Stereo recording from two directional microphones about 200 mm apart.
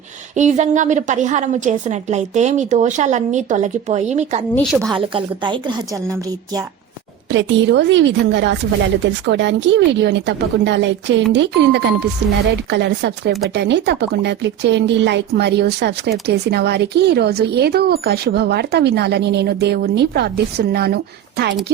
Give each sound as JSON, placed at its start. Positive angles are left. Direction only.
{"t": 0.3, "sound": "a woman's voice", "side_deg": -35}
{"t": 4.5, "sound": "a woman's voice", "side_deg": 0}
{"t": 4.9, "sound": "a woman's voice", "side_deg": -25}
{"t": 7.3, "sound": "speech", "side_deg": -60}